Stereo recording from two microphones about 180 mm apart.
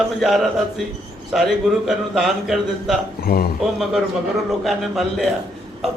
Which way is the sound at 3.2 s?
55° left (ahead or behind).